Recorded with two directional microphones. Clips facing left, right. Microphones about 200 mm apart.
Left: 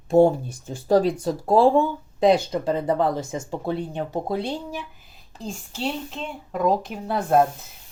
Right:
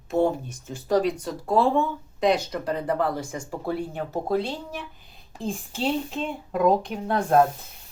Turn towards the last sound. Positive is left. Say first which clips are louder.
# even
turn(degrees=5)  # may be behind; listen again after turning